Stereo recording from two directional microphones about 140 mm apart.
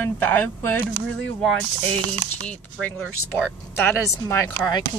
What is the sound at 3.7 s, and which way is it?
Speech, 20° left (ahead or behind).